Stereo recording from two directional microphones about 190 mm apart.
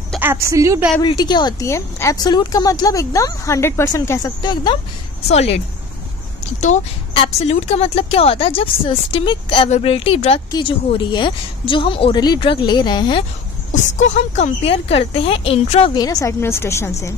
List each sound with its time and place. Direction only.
0.2 s a woman's voice: 15° right (ahead or behind)
1.0 s speech: 20° left (ahead or behind)
5.3 s speech: 35° left (ahead or behind)
7.2 s speech: 35° left (ahead or behind)
13.9 s speech: 35° left (ahead or behind); by 16.9 s 15° left (ahead or behind)